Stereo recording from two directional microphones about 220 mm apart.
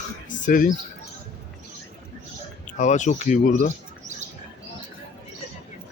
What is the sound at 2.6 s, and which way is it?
Speech, 35° left (ahead or behind).